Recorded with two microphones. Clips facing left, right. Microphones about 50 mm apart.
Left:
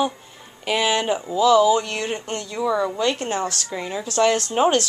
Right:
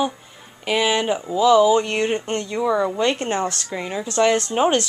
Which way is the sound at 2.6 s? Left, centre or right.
Centre.